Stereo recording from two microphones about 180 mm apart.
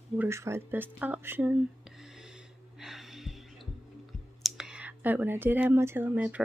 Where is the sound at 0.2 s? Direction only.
15° right (ahead or behind).